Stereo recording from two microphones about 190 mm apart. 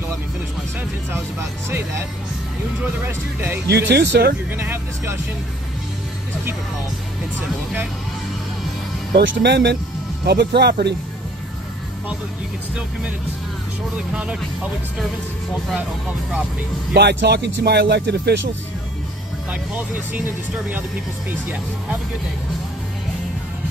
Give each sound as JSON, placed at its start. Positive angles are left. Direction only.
{"t": 3.6, "sound": "speech", "side_deg": -65}
{"t": 4.5, "sound": "speech", "side_deg": -10}
{"t": 9.1, "sound": "speech", "side_deg": -70}
{"t": 14.1, "sound": "speech", "side_deg": -5}
{"t": 16.9, "sound": "speech", "side_deg": -65}
{"t": 19.5, "sound": "speech", "side_deg": -10}